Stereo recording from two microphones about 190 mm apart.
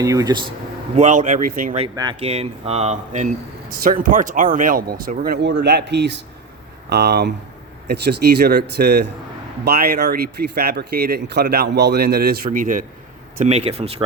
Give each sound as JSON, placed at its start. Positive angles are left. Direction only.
{"t": 0.0, "sound": "speech", "side_deg": -15}
{"t": 0.9, "sound": "speech", "side_deg": -40}
{"t": 2.2, "sound": "speech", "side_deg": -35}